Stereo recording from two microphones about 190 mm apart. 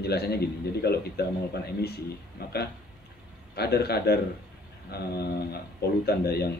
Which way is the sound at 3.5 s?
55° left (ahead or behind).